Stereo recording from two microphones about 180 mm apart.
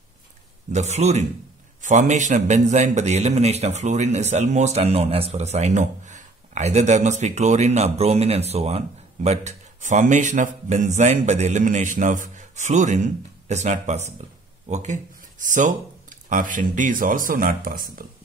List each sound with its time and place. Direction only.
0.7 s a man's voice: 40° right (ahead or behind)